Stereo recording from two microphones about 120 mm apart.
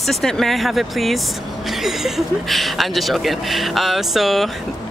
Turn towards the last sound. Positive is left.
turn(degrees=0)  # may be behind; listen again after turning